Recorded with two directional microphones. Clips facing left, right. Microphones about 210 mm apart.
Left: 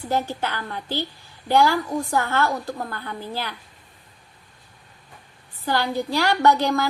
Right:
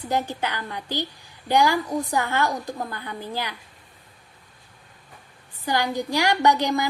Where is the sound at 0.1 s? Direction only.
15° right (ahead or behind).